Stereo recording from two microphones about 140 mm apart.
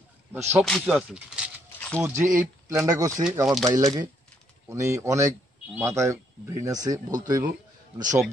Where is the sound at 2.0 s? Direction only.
20° right (ahead or behind).